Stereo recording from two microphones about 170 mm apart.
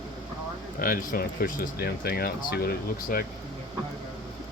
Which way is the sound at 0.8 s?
55° left (ahead or behind).